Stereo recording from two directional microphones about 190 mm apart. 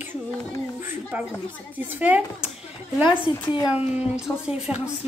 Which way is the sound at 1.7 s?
10° right (ahead or behind).